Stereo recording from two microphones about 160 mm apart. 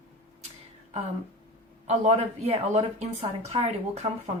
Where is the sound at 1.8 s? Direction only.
45° right (ahead or behind).